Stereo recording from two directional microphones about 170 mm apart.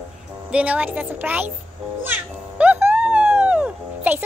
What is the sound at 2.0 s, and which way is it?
Music, 10° right (ahead or behind).